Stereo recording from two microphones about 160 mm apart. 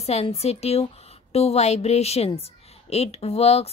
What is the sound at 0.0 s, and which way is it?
A woman's voice, 40° left (ahead or behind).